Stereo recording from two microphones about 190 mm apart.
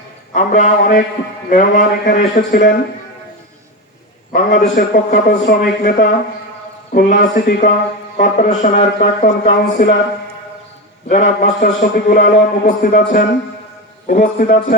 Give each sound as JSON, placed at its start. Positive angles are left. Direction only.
{"t": 0.3, "sound": "a man's voice", "side_deg": 40}
{"t": 4.3, "sound": "a man's voice", "side_deg": 45}
{"t": 9.5, "sound": "speech", "side_deg": 55}
{"t": 11.1, "sound": "a man's voice", "side_deg": 40}